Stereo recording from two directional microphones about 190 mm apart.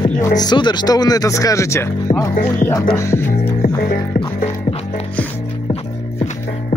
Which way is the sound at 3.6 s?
50° left (ahead or behind).